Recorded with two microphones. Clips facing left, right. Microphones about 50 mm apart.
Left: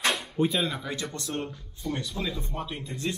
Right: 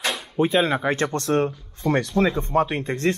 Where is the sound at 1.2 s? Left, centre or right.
Right.